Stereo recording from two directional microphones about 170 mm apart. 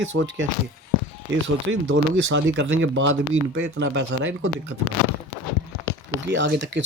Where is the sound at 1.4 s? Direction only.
90° right.